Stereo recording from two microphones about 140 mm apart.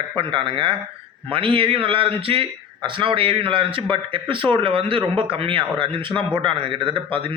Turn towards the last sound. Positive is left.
turn(degrees=-40)  # may be behind; listen again after turning